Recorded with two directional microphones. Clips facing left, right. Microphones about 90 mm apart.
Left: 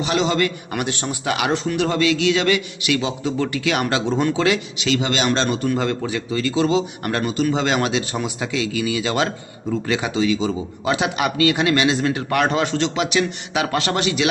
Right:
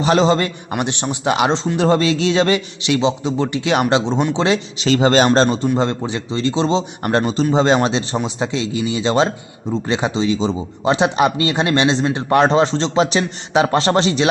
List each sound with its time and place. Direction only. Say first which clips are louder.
0.0 s a man's voice: right 5 dB; 35° right (ahead or behind)
5.6 s a man's voice: right 3 dB; 25° right (ahead or behind)